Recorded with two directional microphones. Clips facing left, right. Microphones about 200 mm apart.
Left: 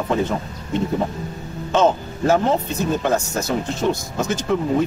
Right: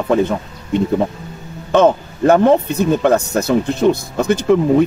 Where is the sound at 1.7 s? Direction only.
60° right (ahead or behind).